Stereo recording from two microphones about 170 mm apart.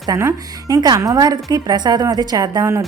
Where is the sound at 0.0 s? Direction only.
20° right (ahead or behind).